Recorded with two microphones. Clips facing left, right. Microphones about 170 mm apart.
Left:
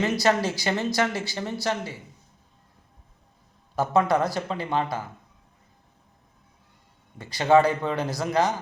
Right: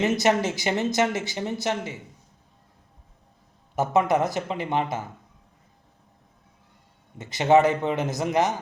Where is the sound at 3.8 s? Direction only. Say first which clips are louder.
Even; 20° right (ahead or behind).